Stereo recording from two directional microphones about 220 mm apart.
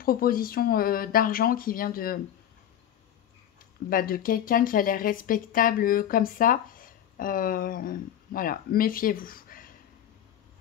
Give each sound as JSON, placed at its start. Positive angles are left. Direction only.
{"t": 0.0, "sound": "speech", "side_deg": 40}
{"t": 3.9, "sound": "speech", "side_deg": 40}